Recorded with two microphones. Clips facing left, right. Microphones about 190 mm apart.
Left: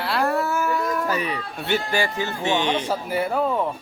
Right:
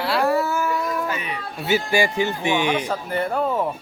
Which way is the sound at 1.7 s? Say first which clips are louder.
Right 3 dB; 10° right (ahead or behind).